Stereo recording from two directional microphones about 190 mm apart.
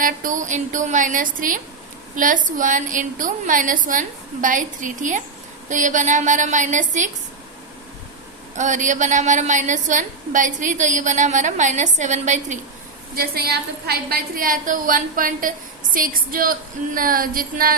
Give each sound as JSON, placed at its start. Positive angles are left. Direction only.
{"t": 0.0, "sound": "a woman's voice", "side_deg": -45}
{"t": 8.5, "sound": "a woman's voice", "side_deg": -40}
{"t": 13.1, "sound": "a woman's voice", "side_deg": -55}